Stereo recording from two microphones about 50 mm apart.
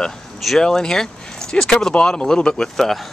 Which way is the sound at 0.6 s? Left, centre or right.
Centre.